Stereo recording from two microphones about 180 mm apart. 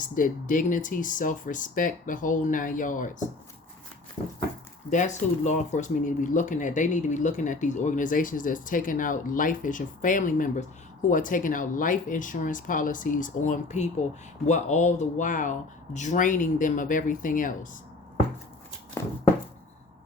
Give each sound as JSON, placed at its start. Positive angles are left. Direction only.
{"t": 0.0, "sound": "speech", "side_deg": 50}
{"t": 4.9, "sound": "speech", "side_deg": 40}